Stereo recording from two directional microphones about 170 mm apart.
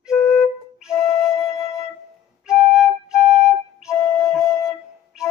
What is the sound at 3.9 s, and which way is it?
Flute, 20° left (ahead or behind).